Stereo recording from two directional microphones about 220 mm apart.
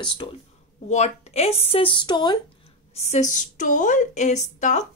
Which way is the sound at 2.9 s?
30° left (ahead or behind).